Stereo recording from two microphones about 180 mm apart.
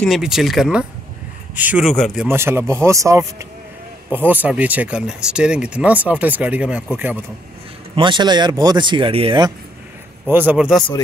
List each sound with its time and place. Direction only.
0.0 s speech: centre (ahead or behind)
2.2 s speech: 15° right (ahead or behind)
7.9 s speech: 25° right (ahead or behind)
10.2 s speech: 10° right (ahead or behind)